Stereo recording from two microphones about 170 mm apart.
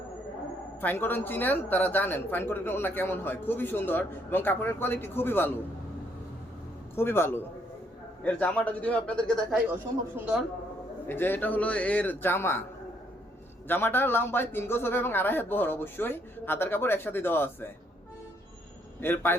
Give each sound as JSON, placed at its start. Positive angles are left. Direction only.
{"t": 0.8, "sound": "speech", "side_deg": 10}
{"t": 6.9, "sound": "speech", "side_deg": 15}
{"t": 10.2, "sound": "a woman's voice", "side_deg": -10}
{"t": 11.1, "sound": "speech", "side_deg": 10}
{"t": 13.7, "sound": "speech", "side_deg": 10}
{"t": 18.9, "sound": "speech", "side_deg": 10}